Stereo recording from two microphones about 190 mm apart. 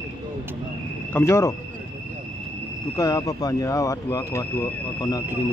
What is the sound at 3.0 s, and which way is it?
Speech, 20° left (ahead or behind).